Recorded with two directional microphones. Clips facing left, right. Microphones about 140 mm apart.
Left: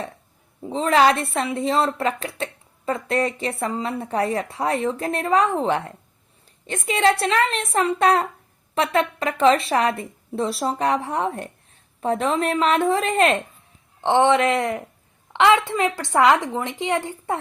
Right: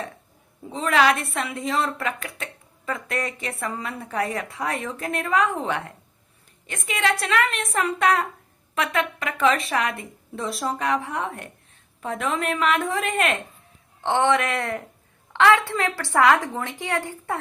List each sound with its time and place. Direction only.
0.7 s a woman's voice: 30° left (ahead or behind)
14.0 s a woman's voice: 20° left (ahead or behind)